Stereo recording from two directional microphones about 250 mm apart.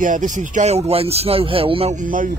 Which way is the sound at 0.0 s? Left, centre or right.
Right.